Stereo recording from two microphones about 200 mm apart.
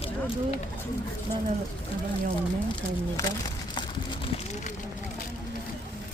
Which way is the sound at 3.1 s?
20° left (ahead or behind).